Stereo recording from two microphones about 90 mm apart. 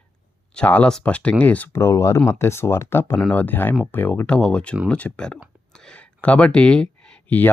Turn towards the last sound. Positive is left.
turn(degrees=15)  # may be behind; listen again after turning